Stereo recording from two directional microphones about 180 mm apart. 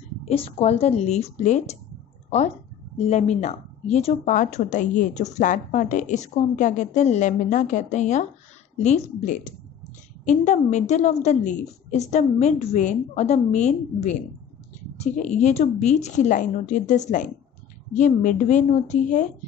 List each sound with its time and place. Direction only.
0.2 s a woman's voice: 35° left (ahead or behind)
3.0 s a woman's voice: 40° left (ahead or behind)